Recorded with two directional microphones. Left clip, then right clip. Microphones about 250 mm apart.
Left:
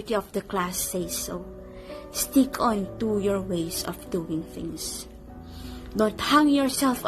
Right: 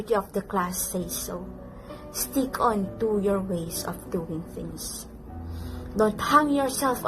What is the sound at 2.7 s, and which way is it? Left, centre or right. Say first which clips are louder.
Speech: right 1 dB; left.